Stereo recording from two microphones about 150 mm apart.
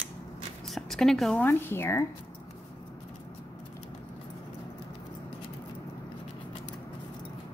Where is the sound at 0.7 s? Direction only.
Centre (ahead or behind).